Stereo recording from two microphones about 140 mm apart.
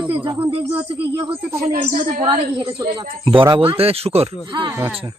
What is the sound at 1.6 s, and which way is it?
Speech, 55° right (ahead or behind).